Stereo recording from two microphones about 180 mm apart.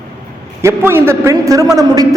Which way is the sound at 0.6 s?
15° right (ahead or behind).